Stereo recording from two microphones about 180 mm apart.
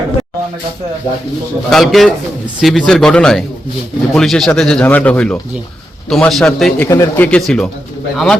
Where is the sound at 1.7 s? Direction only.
Centre (ahead or behind).